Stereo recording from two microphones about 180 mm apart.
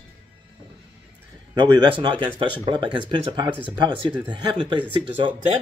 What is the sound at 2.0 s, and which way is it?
Speech, 25° right (ahead or behind).